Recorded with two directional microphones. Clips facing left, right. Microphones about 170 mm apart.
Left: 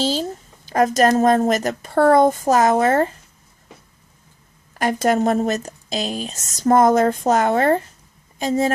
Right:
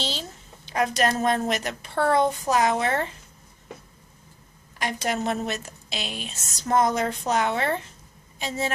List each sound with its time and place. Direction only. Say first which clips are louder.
0.0 s a sound: left 11 dB; 40° left (ahead or behind)
0.7 s speech: left 8 dB; 45° left (ahead or behind)
4.7 s speech: left 9 dB; 45° left (ahead or behind)